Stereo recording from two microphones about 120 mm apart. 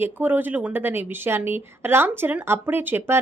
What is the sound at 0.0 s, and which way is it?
A woman's voice, 15° right (ahead or behind).